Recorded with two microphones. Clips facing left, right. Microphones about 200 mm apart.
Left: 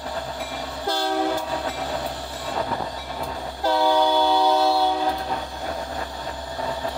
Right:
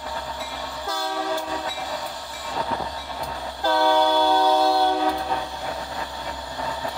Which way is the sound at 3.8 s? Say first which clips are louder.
Even; 10° left (ahead or behind).